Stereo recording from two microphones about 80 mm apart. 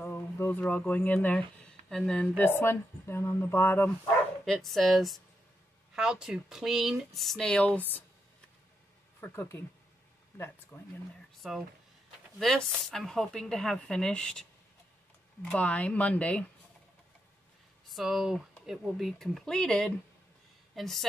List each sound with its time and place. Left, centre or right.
0.0 s speech: left
1.9 s speech: centre
2.3 s speech: left
4.5 s speech: centre; by 8.0 s left
9.2 s speech: left
11.4 s speech: centre
15.5 s speech: centre
17.8 s speech: centre